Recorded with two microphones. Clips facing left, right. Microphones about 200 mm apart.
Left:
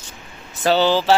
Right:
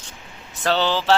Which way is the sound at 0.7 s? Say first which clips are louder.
Left 4 dB; 10° left (ahead or behind).